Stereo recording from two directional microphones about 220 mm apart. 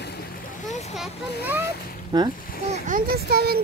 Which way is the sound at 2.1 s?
20° right (ahead or behind).